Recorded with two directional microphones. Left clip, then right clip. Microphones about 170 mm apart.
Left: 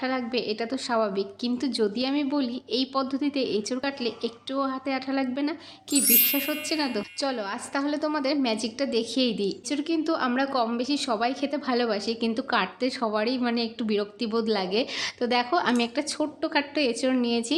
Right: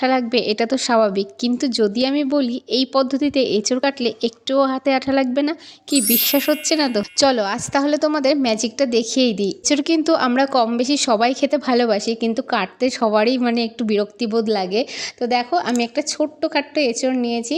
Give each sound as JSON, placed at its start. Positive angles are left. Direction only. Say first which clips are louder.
{"t": 0.0, "sound": "a woman's voice", "louder": "right 10 dB", "side_deg": -50}
{"t": 9.6, "sound": "a woman's voice", "louder": "right 12 dB", "side_deg": -55}